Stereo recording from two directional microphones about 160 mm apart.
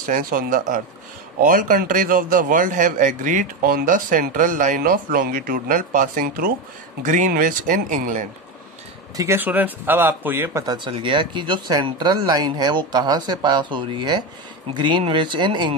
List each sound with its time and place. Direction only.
0.0 s a man's voice: 60° right (ahead or behind)
9.1 s speech: 20° right (ahead or behind)
10.8 s speech: 30° right (ahead or behind)